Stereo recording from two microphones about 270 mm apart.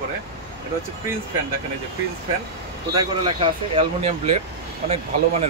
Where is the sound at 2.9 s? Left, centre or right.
Centre.